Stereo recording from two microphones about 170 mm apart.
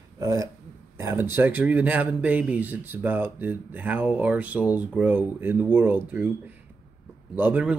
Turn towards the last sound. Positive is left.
turn(degrees=-10)  # may be behind; listen again after turning